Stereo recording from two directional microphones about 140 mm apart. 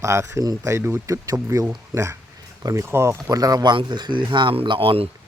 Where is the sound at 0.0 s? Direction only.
20° right (ahead or behind); by 5.0 s 40° right (ahead or behind).